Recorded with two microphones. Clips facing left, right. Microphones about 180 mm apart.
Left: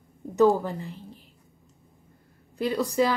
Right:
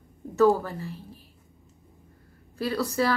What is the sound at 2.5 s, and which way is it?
Speech, 15° left (ahead or behind).